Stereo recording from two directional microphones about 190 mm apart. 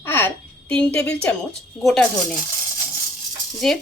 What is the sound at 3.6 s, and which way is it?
Speech, centre (ahead or behind).